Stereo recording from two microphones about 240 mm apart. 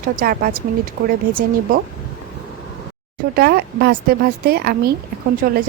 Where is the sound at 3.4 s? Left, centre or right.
Right.